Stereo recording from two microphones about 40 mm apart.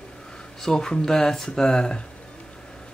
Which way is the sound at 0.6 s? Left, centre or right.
Centre.